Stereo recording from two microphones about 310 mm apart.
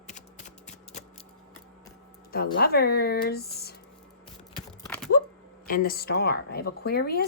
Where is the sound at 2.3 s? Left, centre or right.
Left.